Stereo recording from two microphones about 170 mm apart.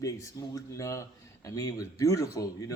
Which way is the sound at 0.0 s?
20° left (ahead or behind).